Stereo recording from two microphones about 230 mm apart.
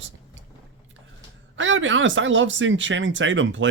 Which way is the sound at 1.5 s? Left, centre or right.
Right.